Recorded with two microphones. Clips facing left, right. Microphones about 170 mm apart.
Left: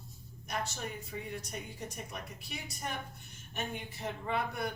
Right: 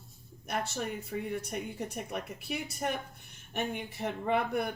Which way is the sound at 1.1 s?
60° right (ahead or behind).